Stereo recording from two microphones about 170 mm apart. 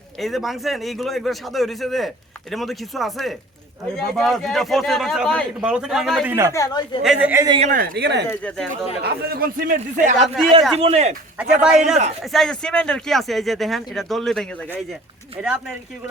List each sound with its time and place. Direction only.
0.2 s a man's voice: centre (ahead or behind)
6.2 s speech: 15° right (ahead or behind)
6.5 s a man's voice: 20° left (ahead or behind)
7.0 s speech: 5° right (ahead or behind)
7.4 s speech: 30° right (ahead or behind)
7.7 s speech: 65° right (ahead or behind)
8.3 s speech: 10° left (ahead or behind)
9.0 s speech: 65° right (ahead or behind); by 10.2 s 45° right (ahead or behind)
10.2 s a man's voice: centre (ahead or behind)
10.8 s speech: 35° right (ahead or behind)
11.3 s a man's voice: 5° right (ahead or behind)